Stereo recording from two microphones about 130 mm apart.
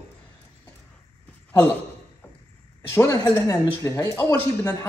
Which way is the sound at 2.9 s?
20° left (ahead or behind).